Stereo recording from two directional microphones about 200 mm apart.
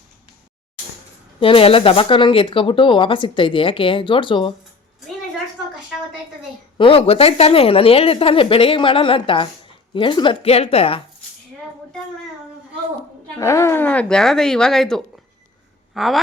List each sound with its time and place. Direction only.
1.4 s speech: 25° left (ahead or behind)
6.7 s speech: 25° left (ahead or behind)
13.3 s a woman's voice: 15° left (ahead or behind); by 16.2 s centre (ahead or behind)